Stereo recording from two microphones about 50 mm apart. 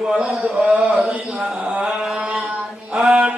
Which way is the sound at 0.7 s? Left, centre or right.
Right.